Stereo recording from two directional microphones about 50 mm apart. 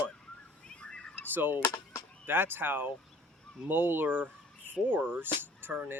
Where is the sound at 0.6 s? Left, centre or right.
Centre.